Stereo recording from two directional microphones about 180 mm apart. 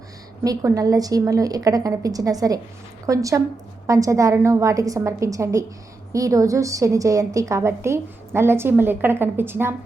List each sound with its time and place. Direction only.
0.4 s a woman's voice: 20° right (ahead or behind)